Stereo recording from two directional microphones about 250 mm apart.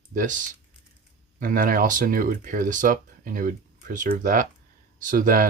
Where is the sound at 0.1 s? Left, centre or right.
Right.